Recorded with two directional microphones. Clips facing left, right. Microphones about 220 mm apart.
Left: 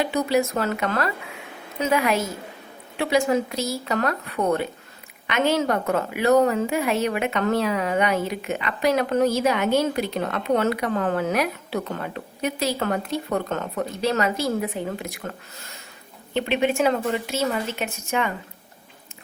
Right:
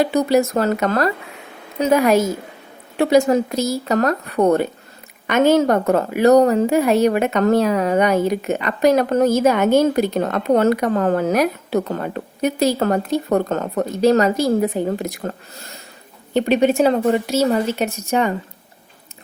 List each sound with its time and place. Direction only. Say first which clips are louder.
0.0 s a woman's voice: right 6 dB; 40° right (ahead or behind)
16.3 s a woman's voice: right 7 dB; 40° right (ahead or behind)